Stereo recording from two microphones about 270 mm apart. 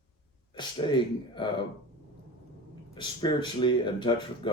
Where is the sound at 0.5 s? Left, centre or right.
Centre.